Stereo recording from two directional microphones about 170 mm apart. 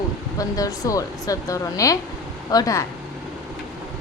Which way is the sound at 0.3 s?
20° left (ahead or behind).